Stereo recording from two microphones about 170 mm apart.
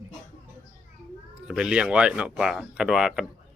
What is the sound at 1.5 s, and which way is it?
Speech, 5° right (ahead or behind).